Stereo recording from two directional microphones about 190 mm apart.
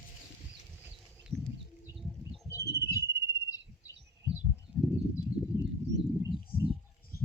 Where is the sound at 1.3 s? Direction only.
15° right (ahead or behind).